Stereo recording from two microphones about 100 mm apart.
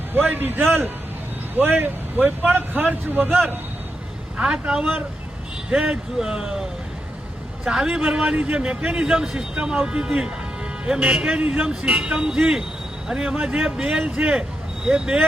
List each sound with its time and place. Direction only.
0.1 s speech: 20° right (ahead or behind)
4.4 s a man's voice: 10° right (ahead or behind)